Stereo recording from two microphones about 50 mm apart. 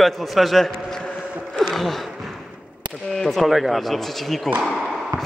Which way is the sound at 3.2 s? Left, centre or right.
Centre.